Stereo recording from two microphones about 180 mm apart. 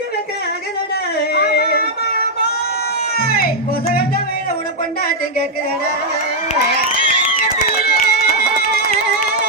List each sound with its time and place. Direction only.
1.3 s a sound: 60° left (ahead or behind)
3.2 s music: 55° left (ahead or behind)
7.9 s music: 60° left (ahead or behind)